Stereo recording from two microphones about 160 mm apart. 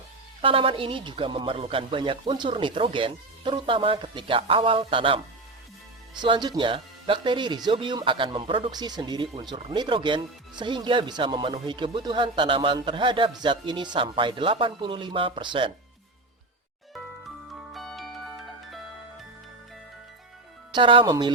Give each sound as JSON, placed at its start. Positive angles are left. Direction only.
{"t": 0.4, "sound": "speech", "side_deg": -35}
{"t": 17.7, "sound": "music", "side_deg": 0}
{"t": 20.7, "sound": "speech", "side_deg": -30}